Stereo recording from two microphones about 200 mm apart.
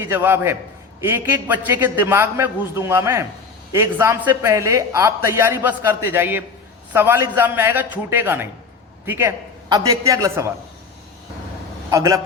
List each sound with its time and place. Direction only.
0.0 s a man's voice: 10° right (ahead or behind)
11.9 s a man's voice: 15° right (ahead or behind)